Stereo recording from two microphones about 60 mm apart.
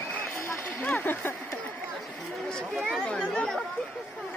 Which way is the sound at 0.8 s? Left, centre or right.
Left.